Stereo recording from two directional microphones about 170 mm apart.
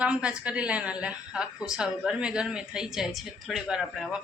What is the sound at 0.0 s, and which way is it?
A woman's voice, 5° right (ahead or behind).